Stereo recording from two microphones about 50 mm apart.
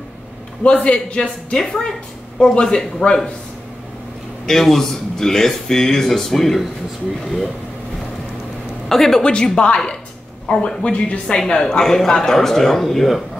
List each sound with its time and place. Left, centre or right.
0.7 s a man's voice: left
4.5 s speech: centre
8.8 s a woman's voice: centre
9.2 s a man's voice: centre